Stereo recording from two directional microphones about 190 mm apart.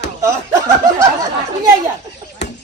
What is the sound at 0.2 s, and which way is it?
Snicker, 15° right (ahead or behind).